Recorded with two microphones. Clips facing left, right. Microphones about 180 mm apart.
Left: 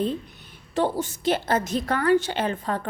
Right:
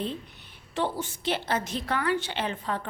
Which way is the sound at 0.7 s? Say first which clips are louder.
Left 5 dB; 40° left (ahead or behind).